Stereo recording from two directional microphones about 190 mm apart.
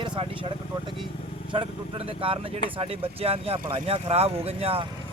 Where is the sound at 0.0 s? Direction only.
25° right (ahead or behind).